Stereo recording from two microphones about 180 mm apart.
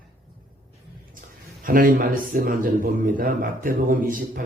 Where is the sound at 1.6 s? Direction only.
50° right (ahead or behind).